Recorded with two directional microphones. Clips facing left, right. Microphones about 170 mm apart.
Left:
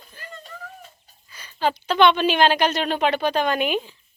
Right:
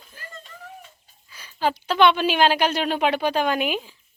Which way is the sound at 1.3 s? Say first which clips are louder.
Left 1 dB; 5° right (ahead or behind).